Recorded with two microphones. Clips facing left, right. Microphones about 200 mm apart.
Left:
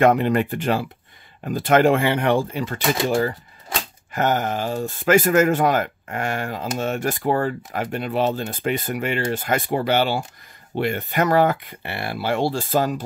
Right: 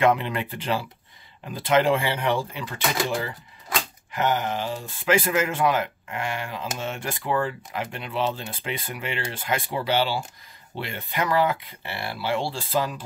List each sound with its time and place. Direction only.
0.0 s speech: 45° left (ahead or behind)